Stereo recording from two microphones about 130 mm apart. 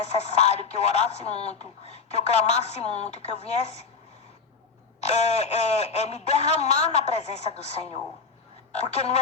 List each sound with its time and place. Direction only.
0.1 s speech: 55° left (ahead or behind)
5.0 s speech: 55° left (ahead or behind)